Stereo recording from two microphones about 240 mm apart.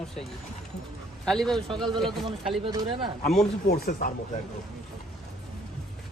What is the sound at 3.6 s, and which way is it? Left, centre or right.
Speech, left.